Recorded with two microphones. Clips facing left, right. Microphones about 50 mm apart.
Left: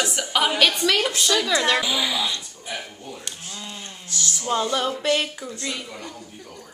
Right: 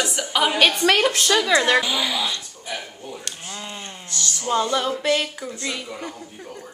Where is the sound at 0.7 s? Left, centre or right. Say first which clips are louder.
Right 3 dB; right.